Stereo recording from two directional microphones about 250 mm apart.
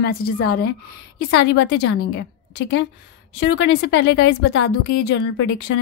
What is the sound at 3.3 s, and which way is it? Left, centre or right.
A woman's voice, left.